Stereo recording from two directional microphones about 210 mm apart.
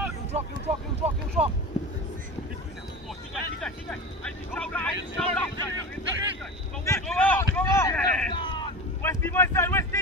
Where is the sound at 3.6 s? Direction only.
5° left (ahead or behind).